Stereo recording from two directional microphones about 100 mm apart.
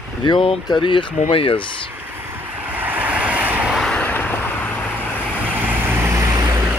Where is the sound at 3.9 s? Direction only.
15° left (ahead or behind).